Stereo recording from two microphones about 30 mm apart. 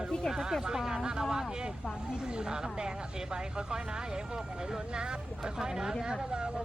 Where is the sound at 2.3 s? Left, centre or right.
Right.